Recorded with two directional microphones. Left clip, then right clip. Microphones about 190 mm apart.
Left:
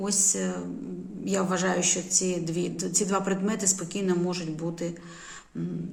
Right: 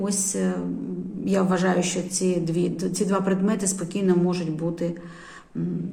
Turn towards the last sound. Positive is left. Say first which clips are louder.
# right 4 dB
turn(degrees=10)  # may be behind; listen again after turning